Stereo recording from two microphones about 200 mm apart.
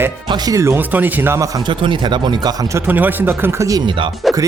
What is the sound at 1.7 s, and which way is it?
Speech, 25° right (ahead or behind).